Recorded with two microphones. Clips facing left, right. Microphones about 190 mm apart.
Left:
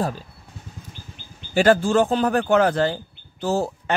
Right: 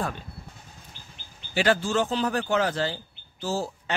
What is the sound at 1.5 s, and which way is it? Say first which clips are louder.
A man's voice: left 7 dB; 45° left (ahead or behind).